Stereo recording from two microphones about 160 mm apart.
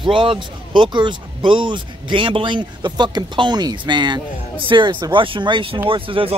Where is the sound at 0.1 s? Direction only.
30° right (ahead or behind).